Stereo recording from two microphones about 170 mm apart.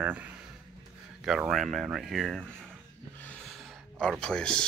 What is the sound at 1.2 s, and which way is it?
Speech, 5° right (ahead or behind).